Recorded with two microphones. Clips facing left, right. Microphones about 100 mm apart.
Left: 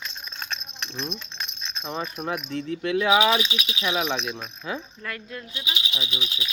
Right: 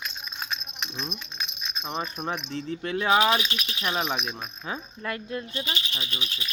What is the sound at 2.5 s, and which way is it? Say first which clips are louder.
Speech: left 4 dB; 35° right (ahead or behind).